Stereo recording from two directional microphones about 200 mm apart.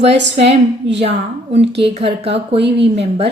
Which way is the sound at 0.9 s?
30° right (ahead or behind).